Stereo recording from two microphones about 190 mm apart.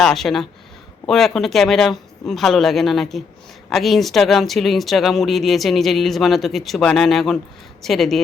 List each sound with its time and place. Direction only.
0.0 s speech: centre (ahead or behind)